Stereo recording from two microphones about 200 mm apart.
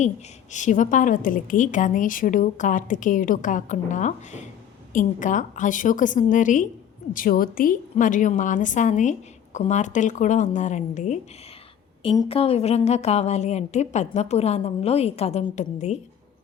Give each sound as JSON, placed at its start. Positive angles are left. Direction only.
{"t": 0.5, "sound": "a woman's voice", "side_deg": 40}